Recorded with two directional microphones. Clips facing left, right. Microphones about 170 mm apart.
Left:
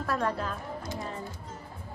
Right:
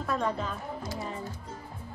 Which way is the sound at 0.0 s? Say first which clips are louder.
Even; centre (ahead or behind).